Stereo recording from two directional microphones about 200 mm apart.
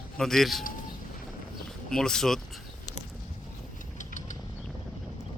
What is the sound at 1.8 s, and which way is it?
Speech, 5° left (ahead or behind).